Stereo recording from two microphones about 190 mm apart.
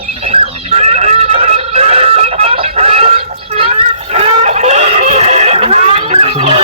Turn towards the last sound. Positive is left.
turn(degrees=-30)  # may be behind; listen again after turning